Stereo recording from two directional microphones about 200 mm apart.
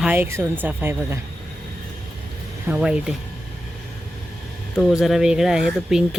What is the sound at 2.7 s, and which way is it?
Speech, 5° right (ahead or behind).